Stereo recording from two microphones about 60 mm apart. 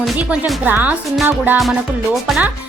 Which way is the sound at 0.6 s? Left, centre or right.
Right.